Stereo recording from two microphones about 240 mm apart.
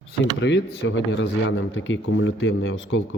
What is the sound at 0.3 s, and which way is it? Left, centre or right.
Speech, left.